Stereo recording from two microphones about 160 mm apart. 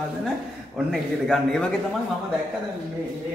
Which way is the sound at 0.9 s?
Centre (ahead or behind).